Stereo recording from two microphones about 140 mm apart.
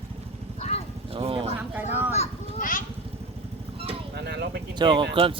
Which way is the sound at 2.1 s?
50° left (ahead or behind).